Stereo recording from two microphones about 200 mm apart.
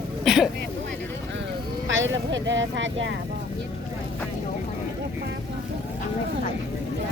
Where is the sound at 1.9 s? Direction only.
70° right (ahead or behind).